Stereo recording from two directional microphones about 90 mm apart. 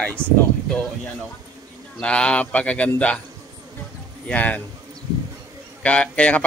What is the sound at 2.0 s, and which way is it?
A man's voice, 10° left (ahead or behind).